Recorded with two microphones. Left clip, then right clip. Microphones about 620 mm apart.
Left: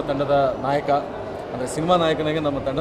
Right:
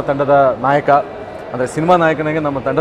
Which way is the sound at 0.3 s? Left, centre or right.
Right.